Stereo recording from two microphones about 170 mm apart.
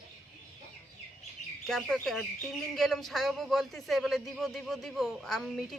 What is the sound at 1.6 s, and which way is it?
Speech, centre (ahead or behind).